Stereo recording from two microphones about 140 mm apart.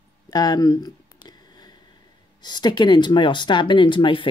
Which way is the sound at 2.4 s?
30° left (ahead or behind).